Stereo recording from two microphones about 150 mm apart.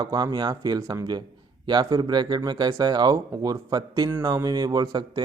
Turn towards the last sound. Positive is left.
turn(degrees=-25)  # may be behind; listen again after turning